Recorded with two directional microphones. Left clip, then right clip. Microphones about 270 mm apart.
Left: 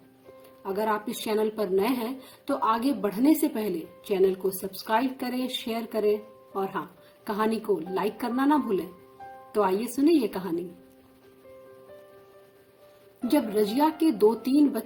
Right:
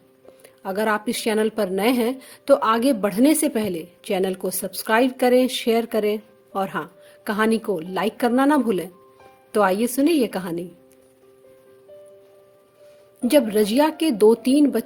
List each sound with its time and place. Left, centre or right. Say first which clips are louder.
0.6 s a woman's voice: right 5 dB; right
13.2 s a woman's voice: right 7 dB; right